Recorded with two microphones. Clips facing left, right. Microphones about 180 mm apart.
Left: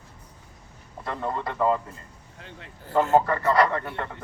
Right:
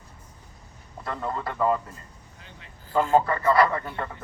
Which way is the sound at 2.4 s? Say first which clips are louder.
Left 7 dB; 60° left (ahead or behind).